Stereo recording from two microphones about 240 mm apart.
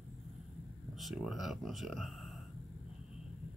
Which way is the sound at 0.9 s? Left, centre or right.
Centre.